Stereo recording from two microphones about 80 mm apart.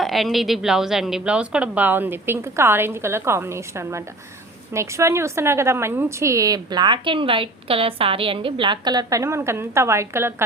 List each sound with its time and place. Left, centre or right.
0.0 s a woman's voice: centre; by 6.6 s right
6.7 s a woman's voice: right